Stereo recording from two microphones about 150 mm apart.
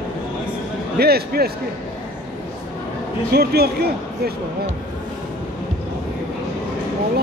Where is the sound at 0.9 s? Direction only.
90° right.